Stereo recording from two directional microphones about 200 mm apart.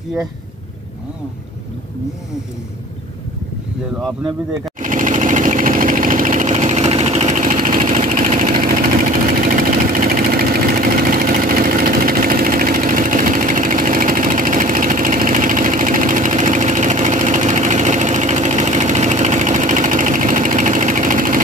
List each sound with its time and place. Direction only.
4.7 s sewing machine: 40° right (ahead or behind)
8.6 s engine: 45° right (ahead or behind)